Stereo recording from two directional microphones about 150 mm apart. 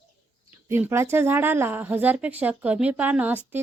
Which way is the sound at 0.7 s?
15° right (ahead or behind).